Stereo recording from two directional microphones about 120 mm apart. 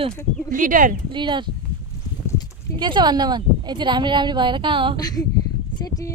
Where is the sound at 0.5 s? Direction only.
90° right.